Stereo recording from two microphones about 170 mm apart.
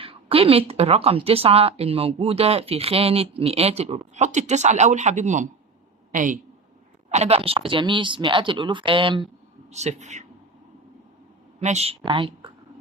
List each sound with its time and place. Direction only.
0.0 s a woman's voice: 35° right (ahead or behind); by 6.4 s 50° right (ahead or behind)
7.1 s speech: 40° right (ahead or behind)
9.7 s speech: 40° right (ahead or behind)
11.6 s a woman's voice: 40° right (ahead or behind)